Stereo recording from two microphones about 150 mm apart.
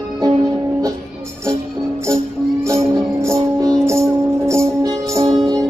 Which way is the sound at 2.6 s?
20° right (ahead or behind).